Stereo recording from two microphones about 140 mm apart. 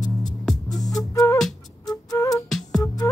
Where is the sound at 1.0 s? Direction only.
25° left (ahead or behind).